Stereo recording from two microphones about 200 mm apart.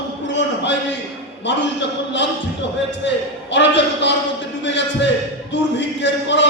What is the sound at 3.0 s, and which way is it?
A man's voice, 60° left (ahead or behind).